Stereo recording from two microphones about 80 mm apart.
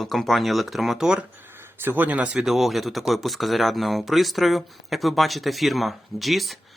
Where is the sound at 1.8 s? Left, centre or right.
Right.